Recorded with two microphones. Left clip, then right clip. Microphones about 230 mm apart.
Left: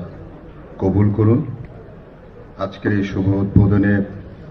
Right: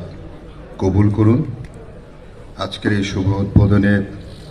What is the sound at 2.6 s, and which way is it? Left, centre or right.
A man's voice, right.